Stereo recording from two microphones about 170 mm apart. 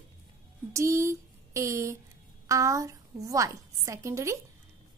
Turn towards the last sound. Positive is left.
turn(degrees=-15)  # may be behind; listen again after turning